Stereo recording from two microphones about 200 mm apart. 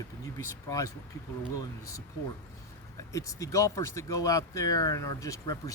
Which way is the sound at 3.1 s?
15° left (ahead or behind).